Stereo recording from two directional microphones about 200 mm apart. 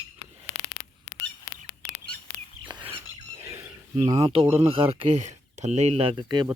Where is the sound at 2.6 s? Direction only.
25° right (ahead or behind).